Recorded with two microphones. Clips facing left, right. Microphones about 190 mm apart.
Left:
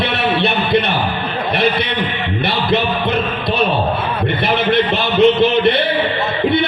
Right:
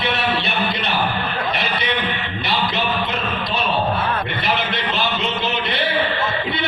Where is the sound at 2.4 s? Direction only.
60° left (ahead or behind).